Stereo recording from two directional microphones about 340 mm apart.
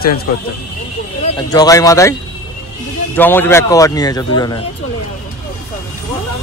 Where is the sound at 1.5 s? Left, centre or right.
Centre.